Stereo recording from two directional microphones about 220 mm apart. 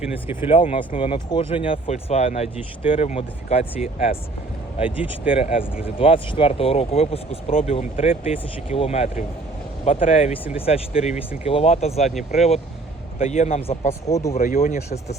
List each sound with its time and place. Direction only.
0.4 s speech: 25° left (ahead or behind)
12.0 s speech: centre (ahead or behind)
13.1 s speech: 30° left (ahead or behind)
14.1 s speech: 15° left (ahead or behind)
14.3 s speech: 40° left (ahead or behind)